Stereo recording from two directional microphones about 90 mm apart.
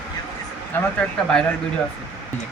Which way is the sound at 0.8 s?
10° left (ahead or behind).